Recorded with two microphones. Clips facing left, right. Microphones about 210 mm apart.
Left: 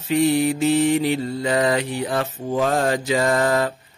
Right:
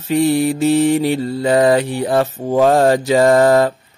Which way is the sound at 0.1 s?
35° right (ahead or behind).